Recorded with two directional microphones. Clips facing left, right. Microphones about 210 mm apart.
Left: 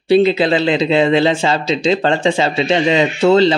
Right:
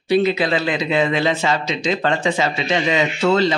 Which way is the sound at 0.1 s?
30° left (ahead or behind).